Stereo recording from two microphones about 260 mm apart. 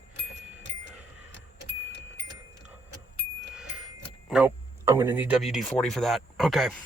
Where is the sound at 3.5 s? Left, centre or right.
Centre.